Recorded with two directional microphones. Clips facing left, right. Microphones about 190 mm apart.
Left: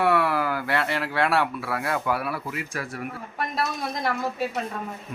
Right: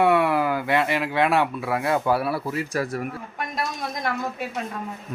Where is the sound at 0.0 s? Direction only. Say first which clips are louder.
Right 3 dB; 20° right (ahead or behind); by 3.0 s 40° right (ahead or behind).